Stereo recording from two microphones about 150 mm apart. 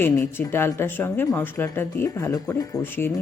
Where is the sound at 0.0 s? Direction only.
15° left (ahead or behind).